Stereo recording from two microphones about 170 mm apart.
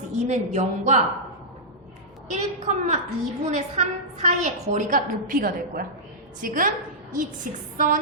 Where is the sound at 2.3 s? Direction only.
45° right (ahead or behind).